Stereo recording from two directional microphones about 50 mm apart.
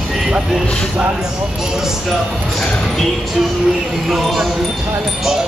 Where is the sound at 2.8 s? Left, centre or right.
Centre.